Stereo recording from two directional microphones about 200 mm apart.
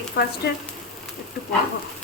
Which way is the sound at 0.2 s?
55° left (ahead or behind).